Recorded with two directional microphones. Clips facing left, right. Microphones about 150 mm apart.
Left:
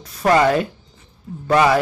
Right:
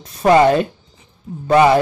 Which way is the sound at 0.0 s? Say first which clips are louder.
Right 4 dB; 20° right (ahead or behind).